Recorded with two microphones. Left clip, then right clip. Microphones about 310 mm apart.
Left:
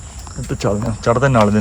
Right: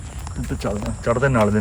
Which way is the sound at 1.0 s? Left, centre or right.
Centre.